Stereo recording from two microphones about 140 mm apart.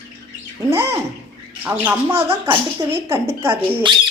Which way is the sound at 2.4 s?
25° right (ahead or behind).